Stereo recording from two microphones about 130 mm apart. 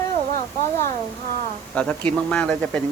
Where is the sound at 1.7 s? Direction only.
10° left (ahead or behind).